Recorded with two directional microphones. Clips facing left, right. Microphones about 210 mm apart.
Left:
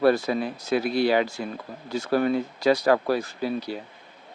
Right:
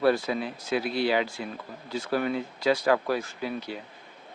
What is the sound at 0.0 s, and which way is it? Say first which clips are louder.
Speech: left 3 dB; 40° left (ahead or behind).